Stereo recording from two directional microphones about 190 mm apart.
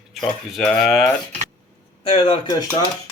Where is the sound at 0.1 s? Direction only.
Centre (ahead or behind).